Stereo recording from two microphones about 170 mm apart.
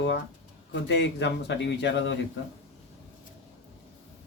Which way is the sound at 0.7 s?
90° left.